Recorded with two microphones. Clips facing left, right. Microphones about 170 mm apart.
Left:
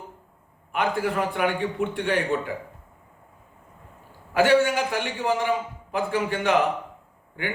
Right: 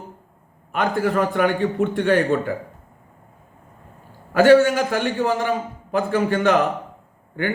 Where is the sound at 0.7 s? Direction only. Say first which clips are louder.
Right 4 dB; 40° right (ahead or behind).